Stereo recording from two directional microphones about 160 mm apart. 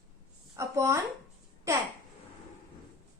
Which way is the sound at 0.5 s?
20° right (ahead or behind).